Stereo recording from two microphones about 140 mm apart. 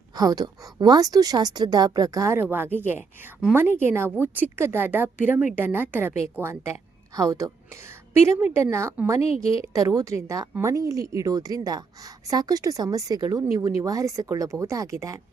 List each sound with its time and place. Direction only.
0.2 s a woman's voice: 25° right (ahead or behind)
9.2 s a woman's voice: 45° left (ahead or behind)
9.7 s speech: 25° right (ahead or behind)